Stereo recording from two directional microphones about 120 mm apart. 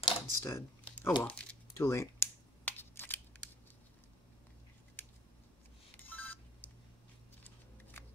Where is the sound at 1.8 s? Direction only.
25° left (ahead or behind).